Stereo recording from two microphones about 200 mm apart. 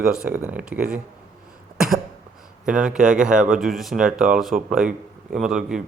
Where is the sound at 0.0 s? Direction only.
5° right (ahead or behind).